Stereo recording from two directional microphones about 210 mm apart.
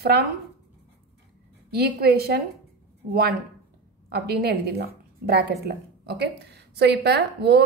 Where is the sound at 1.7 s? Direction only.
50° right (ahead or behind).